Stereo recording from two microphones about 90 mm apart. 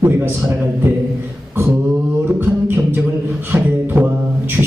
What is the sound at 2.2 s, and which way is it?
Speech, 20° right (ahead or behind).